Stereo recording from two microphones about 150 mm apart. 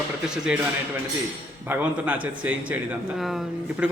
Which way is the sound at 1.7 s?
10° right (ahead or behind).